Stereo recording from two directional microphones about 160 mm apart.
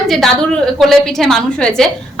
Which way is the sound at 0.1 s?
Centre (ahead or behind).